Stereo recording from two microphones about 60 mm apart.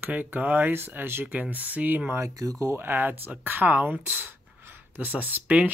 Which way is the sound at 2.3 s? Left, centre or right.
Right.